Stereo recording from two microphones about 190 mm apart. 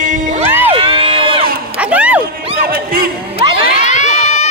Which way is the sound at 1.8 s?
5° right (ahead or behind).